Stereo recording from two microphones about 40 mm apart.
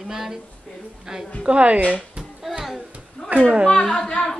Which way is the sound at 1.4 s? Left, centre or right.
Right.